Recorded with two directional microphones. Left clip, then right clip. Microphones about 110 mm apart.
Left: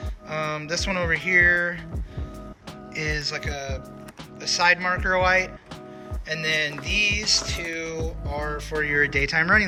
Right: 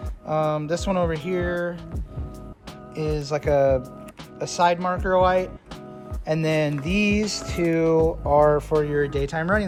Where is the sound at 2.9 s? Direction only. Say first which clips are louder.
Right 1 dB; 25° right (ahead or behind).